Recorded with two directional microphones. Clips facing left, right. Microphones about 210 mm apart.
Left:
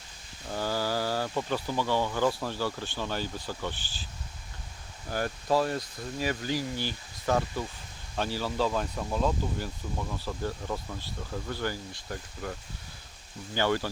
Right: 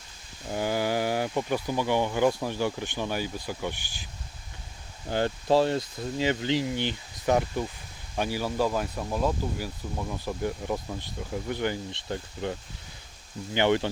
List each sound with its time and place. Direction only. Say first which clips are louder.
0.5 s speech: right 3 dB; 20° right (ahead or behind)
5.0 s speech: right 4 dB; 25° right (ahead or behind)